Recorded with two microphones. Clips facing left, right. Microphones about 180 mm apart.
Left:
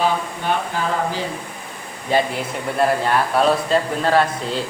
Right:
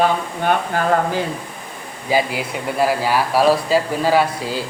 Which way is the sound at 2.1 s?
5° right (ahead or behind).